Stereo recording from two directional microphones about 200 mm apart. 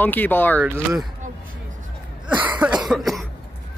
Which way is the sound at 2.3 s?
5° right (ahead or behind).